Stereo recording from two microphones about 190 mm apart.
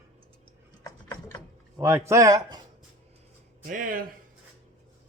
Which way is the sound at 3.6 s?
45° right (ahead or behind).